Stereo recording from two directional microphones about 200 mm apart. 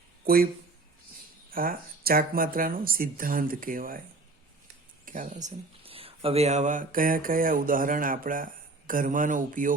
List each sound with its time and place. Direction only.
0.3 s speech: 50° right (ahead or behind)
1.5 s speech: 45° right (ahead or behind)
5.0 s a man's voice: 40° right (ahead or behind)